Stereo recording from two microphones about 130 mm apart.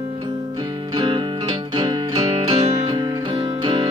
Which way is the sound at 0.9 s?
40° right (ahead or behind).